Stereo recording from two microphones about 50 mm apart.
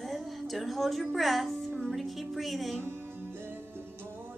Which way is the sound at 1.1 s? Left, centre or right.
Centre.